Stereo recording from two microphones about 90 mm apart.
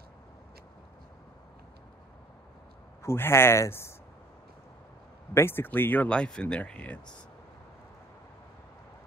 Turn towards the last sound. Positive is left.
turn(degrees=15)  # may be behind; listen again after turning